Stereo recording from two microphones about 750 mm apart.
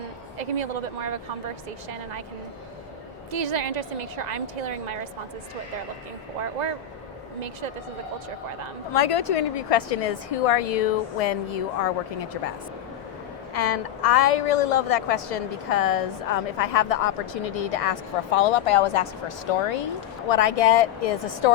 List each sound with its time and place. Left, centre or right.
0.3 s a woman's voice: right
3.3 s a woman's voice: right
6.6 s a woman's voice: right
8.9 s a woman's voice: left
13.5 s a woman's voice: left